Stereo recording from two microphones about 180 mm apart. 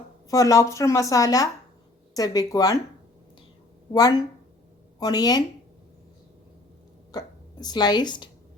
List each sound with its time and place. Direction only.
0.3 s speech: 20° left (ahead or behind)
3.9 s speech: 20° left (ahead or behind)
7.1 s speech: 20° left (ahead or behind)